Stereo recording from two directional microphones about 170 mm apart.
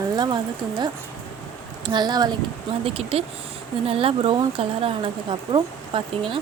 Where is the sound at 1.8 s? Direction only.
25° right (ahead or behind).